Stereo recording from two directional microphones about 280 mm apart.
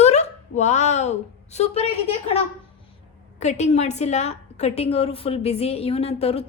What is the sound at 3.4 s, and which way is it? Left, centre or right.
A woman's voice, left.